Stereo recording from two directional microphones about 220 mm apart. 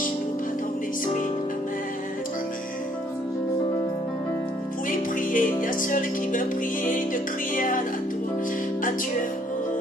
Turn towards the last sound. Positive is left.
turn(degrees=40)  # may be behind; listen again after turning